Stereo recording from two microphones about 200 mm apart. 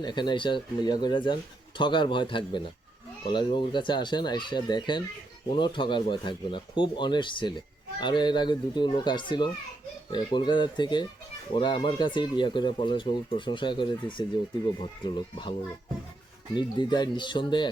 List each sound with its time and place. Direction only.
0.0 s speech: 20° left (ahead or behind)
16.6 s speech: 20° left (ahead or behind)